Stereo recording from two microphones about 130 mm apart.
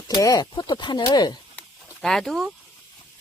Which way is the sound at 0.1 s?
25° left (ahead or behind).